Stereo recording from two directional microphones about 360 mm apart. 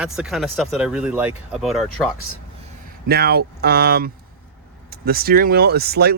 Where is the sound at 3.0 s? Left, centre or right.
Right.